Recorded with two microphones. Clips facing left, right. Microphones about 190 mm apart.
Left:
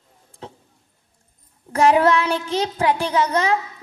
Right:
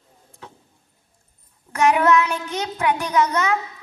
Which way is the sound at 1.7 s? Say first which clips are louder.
Left 1 dB; 30° left (ahead or behind).